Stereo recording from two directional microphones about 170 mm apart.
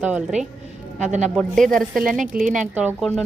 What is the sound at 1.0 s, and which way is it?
Speech, 45° right (ahead or behind).